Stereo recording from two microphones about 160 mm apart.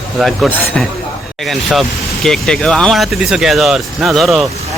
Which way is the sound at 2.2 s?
5° left (ahead or behind).